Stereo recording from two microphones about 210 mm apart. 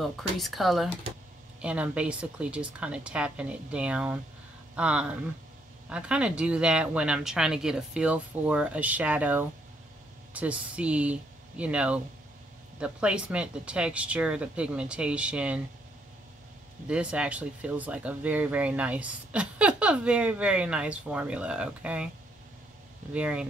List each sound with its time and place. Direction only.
0.0 s speech: centre (ahead or behind)
16.8 s speech: 5° right (ahead or behind)
23.1 s speech: 5° right (ahead or behind)